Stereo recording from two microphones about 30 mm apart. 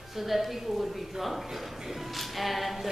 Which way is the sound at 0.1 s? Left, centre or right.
Centre.